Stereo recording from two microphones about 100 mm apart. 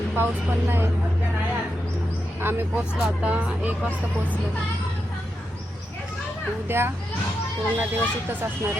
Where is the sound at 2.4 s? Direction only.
20° right (ahead or behind).